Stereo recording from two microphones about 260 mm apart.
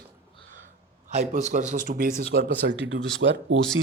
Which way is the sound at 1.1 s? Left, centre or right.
Right.